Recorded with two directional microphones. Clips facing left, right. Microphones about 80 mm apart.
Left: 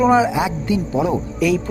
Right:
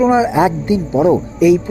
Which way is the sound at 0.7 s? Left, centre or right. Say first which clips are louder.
Right 3 dB; right.